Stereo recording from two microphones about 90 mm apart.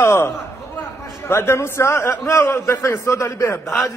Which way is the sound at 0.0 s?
30° left (ahead or behind).